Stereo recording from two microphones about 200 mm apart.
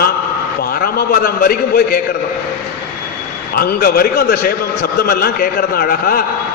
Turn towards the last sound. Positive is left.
turn(degrees=50)  # may be behind; listen again after turning